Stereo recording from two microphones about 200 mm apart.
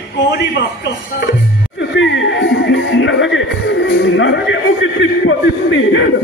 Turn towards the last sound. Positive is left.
turn(degrees=65)  # may be behind; listen again after turning